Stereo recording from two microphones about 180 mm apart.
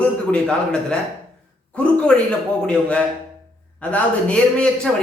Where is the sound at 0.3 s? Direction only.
5° left (ahead or behind).